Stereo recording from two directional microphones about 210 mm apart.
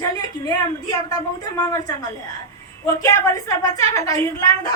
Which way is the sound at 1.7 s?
15° left (ahead or behind).